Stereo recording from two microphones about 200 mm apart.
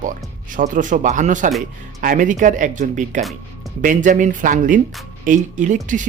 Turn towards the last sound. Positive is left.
turn(degrees=-40)  # may be behind; listen again after turning